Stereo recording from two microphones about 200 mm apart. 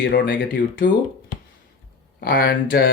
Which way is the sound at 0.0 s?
45° left (ahead or behind).